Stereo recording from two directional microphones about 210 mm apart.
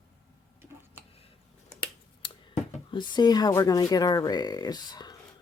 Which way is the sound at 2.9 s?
20° left (ahead or behind).